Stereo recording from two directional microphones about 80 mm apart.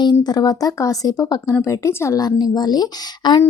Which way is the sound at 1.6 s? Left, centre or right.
Left.